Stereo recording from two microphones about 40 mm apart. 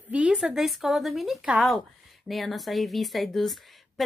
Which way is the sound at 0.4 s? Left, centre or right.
Centre.